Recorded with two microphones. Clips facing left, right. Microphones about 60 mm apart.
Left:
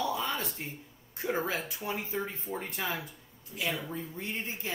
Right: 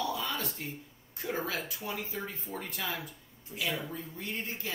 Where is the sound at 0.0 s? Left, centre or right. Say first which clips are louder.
Left 2 dB; left.